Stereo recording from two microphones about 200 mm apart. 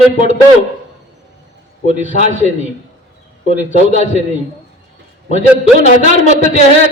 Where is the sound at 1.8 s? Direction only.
35° right (ahead or behind).